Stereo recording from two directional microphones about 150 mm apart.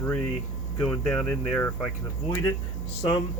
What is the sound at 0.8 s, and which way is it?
Speech, 5° left (ahead or behind).